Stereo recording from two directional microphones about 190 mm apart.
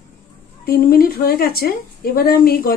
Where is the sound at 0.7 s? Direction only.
50° left (ahead or behind).